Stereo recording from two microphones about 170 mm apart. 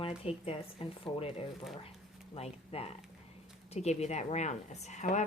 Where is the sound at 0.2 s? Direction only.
35° left (ahead or behind).